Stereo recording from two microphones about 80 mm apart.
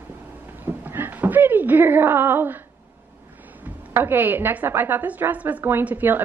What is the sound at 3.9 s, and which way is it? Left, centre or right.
A woman's voice, right.